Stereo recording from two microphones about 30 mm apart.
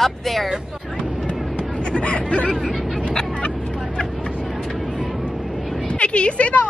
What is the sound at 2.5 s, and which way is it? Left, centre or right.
Speech, centre.